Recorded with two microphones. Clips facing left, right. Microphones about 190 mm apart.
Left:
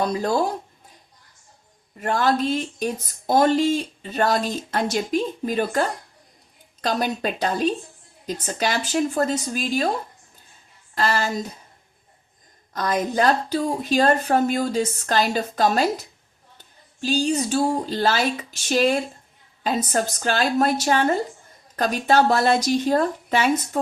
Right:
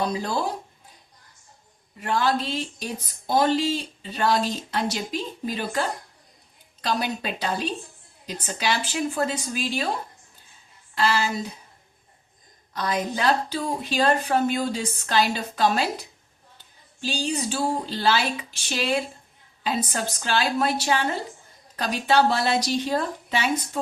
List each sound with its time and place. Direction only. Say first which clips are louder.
0.0 s speech: left 4 dB; 45° left (ahead or behind)
2.0 s speech: left 3 dB; 45° left (ahead or behind)
10.9 s speech: left 1 dB; 45° left (ahead or behind)
12.7 s speech: left 4 dB; 45° left (ahead or behind)
17.0 s speech: left 6 dB; 45° left (ahead or behind)